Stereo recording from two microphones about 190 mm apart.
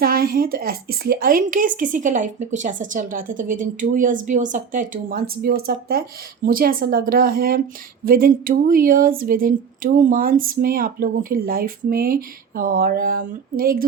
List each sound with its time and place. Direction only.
0.0 s a woman's voice: 50° right (ahead or behind)